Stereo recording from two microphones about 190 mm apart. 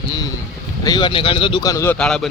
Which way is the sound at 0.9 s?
25° left (ahead or behind).